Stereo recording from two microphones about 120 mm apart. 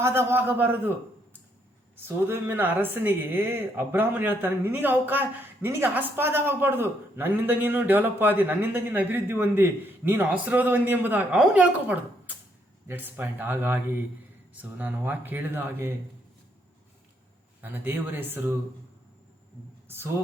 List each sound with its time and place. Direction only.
0.0 s speech: 20° right (ahead or behind)
17.6 s speech: 15° right (ahead or behind)